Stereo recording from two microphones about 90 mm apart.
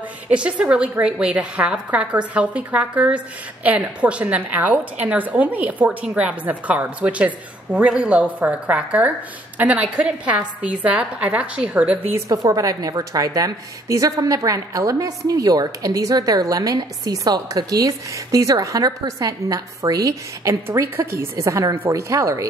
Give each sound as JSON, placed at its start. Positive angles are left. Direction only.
{"t": 0.3, "sound": "a woman's voice", "side_deg": -15}
{"t": 12.3, "sound": "a woman's voice", "side_deg": -40}
{"t": 20.6, "sound": "a woman's voice", "side_deg": -25}
{"t": 21.7, "sound": "speech", "side_deg": -25}
{"t": 22.1, "sound": "a woman's voice", "side_deg": -35}